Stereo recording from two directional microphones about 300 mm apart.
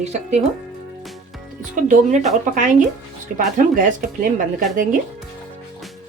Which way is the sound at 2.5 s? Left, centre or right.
Right.